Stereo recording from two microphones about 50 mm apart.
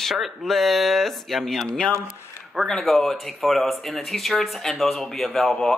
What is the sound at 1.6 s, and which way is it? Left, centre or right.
Speech, centre.